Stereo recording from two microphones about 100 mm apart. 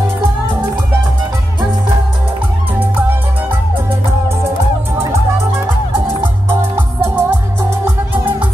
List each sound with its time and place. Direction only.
6.2 s music: 20° right (ahead or behind)